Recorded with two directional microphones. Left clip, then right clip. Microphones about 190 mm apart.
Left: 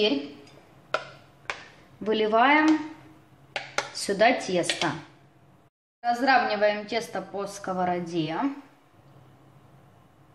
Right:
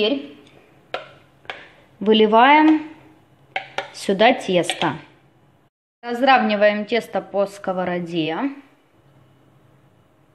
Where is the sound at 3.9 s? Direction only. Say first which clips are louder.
Right 6 dB; 35° right (ahead or behind).